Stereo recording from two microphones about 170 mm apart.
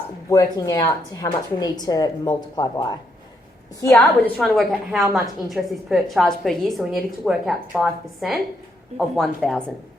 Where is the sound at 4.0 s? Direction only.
5° left (ahead or behind).